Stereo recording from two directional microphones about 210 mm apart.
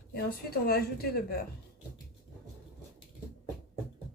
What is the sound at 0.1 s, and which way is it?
A woman's voice, 50° left (ahead or behind).